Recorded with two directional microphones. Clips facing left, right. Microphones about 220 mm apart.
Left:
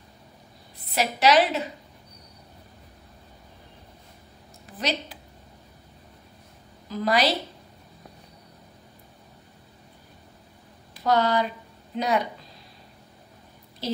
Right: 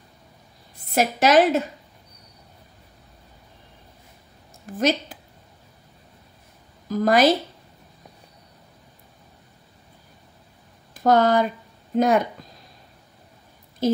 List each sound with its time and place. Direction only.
0.7 s a woman's voice: 50° right (ahead or behind)
4.7 s a woman's voice: 45° right (ahead or behind)
6.9 s a woman's voice: 45° right (ahead or behind)
11.0 s a woman's voice: 50° right (ahead or behind)
13.8 s a woman's voice: 50° right (ahead or behind)